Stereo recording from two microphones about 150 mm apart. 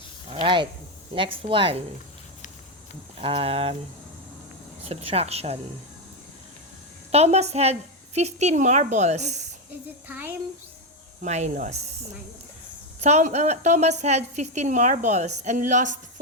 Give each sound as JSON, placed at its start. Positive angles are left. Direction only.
{"t": 0.4, "sound": "speech", "side_deg": -35}
{"t": 3.2, "sound": "speech", "side_deg": -40}
{"t": 4.9, "sound": "a woman's voice", "side_deg": -45}
{"t": 7.1, "sound": "a woman's voice", "side_deg": -45}
{"t": 10.1, "sound": "speech", "side_deg": -15}
{"t": 11.2, "sound": "a woman's voice", "side_deg": -50}